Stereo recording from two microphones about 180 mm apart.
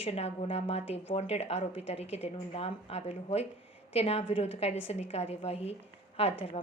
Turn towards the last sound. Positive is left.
turn(degrees=30)  # may be behind; listen again after turning